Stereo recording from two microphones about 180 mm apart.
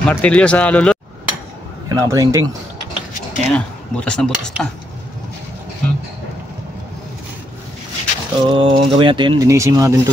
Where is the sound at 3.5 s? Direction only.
5° left (ahead or behind).